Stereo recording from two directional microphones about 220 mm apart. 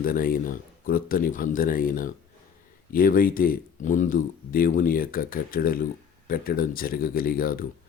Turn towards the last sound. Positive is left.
turn(degrees=40)  # may be behind; listen again after turning